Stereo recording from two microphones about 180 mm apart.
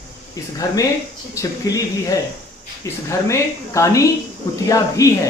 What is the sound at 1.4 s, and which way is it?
Speech, 20° left (ahead or behind).